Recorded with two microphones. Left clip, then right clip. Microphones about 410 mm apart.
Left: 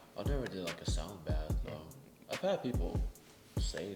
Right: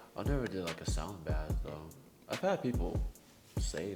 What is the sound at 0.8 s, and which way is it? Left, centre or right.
Music, right.